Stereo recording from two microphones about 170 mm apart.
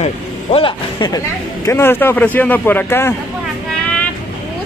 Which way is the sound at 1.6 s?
15° left (ahead or behind).